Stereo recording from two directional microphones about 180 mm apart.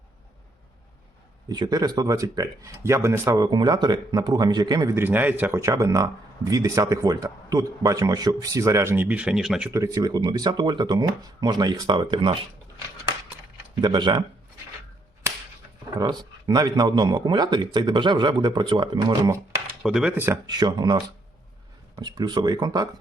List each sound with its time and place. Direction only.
1.5 s speech: 20° right (ahead or behind)
13.8 s speech: 25° right (ahead or behind)
16.0 s speech: 20° right (ahead or behind)
19.8 s speech: 5° right (ahead or behind)
20.5 s speech: 25° right (ahead or behind)